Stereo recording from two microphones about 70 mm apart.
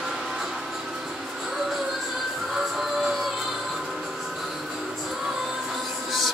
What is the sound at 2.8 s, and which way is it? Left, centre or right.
Music, centre.